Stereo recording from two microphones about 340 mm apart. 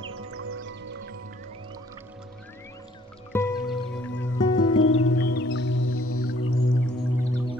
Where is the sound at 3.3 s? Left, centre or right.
Centre.